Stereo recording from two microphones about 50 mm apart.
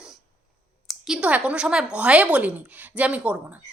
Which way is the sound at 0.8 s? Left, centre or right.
Centre.